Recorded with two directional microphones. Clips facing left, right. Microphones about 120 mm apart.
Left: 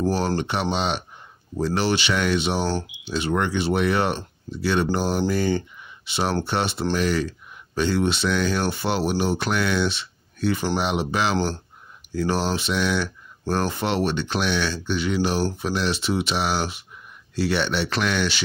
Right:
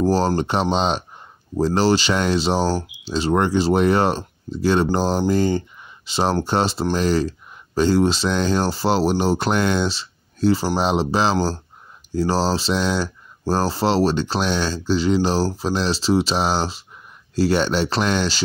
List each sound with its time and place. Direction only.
0.0 s speech: 40° right (ahead or behind)